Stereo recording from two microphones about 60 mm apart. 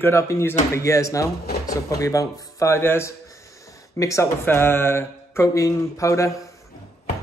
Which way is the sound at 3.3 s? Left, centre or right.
Left.